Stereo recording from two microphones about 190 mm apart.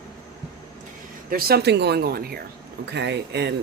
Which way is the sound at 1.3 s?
55° right (ahead or behind).